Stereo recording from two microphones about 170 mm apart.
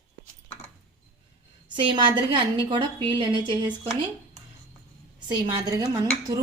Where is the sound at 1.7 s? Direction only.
25° right (ahead or behind).